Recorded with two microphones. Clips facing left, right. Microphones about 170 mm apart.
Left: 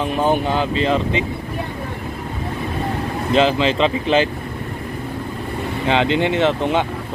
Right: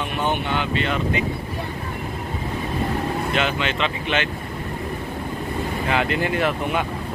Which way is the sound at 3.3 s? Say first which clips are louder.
Left 12 dB; 30° left (ahead or behind).